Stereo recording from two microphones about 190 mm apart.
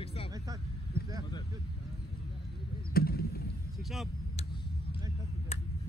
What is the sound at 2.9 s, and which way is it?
Basketball bounce, 50° left (ahead or behind).